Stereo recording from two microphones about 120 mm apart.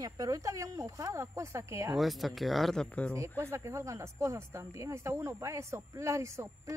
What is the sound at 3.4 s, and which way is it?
Speech, 25° right (ahead or behind).